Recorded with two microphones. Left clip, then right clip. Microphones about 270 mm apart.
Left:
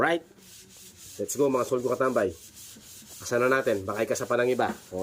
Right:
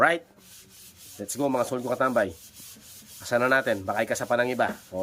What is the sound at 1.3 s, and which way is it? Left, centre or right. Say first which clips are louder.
Speech: left 1 dB; centre.